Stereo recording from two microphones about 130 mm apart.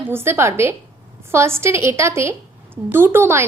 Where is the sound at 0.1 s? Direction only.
20° right (ahead or behind).